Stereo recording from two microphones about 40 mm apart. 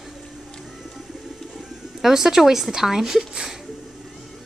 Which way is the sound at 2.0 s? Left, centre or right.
Centre.